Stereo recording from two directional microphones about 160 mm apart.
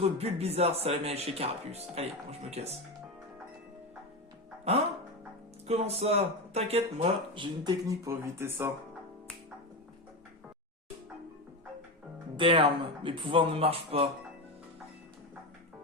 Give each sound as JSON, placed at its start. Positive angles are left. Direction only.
{"t": 0.0, "sound": "speech", "side_deg": -40}
{"t": 4.7, "sound": "speech", "side_deg": -40}
{"t": 12.4, "sound": "speech", "side_deg": -35}